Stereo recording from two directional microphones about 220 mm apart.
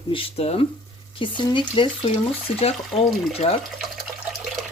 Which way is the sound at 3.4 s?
25° left (ahead or behind).